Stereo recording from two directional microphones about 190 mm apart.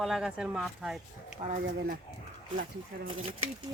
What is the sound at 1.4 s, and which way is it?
Speech, 45° right (ahead or behind).